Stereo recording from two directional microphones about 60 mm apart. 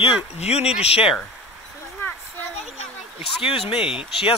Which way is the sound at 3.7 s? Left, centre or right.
Centre.